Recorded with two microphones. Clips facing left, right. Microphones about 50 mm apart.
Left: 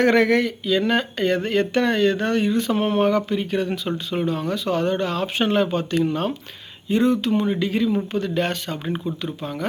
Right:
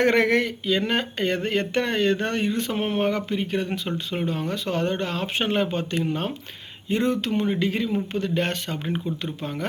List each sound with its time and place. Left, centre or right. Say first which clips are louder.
0.0 s speech: left 3 dB; right